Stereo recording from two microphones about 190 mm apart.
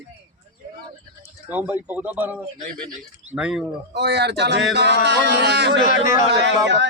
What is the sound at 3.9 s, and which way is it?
Speech, 60° right (ahead or behind).